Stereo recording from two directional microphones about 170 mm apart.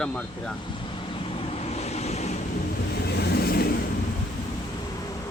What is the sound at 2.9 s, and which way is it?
Vehicle, 70° left (ahead or behind).